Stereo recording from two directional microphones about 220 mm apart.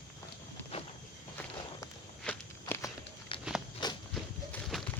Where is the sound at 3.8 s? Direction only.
20° left (ahead or behind).